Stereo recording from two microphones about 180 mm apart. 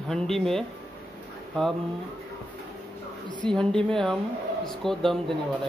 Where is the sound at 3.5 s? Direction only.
5° left (ahead or behind).